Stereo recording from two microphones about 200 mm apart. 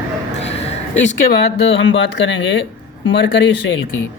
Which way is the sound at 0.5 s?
30° left (ahead or behind).